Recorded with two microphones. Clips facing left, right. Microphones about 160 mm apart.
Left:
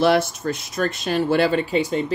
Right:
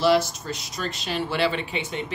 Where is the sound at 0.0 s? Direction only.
55° left (ahead or behind).